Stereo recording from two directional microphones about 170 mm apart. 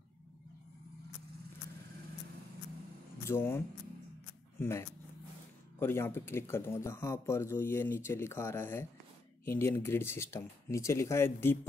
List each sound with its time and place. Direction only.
3.3 s speech: 15° left (ahead or behind)